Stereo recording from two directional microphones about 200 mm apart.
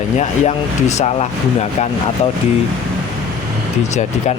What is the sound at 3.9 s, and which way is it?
Speech, 35° left (ahead or behind).